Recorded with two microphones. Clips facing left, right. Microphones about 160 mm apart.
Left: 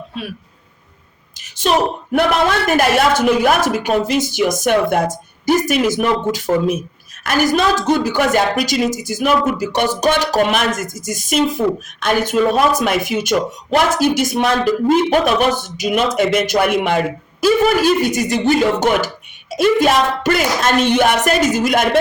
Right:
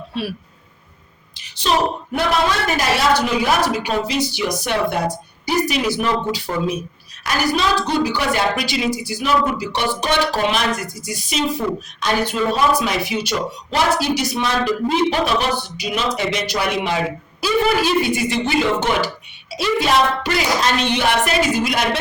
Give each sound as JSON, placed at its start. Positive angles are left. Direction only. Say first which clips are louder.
{"t": 1.4, "sound": "a woman's voice", "louder": "left 3 dB", "side_deg": 45}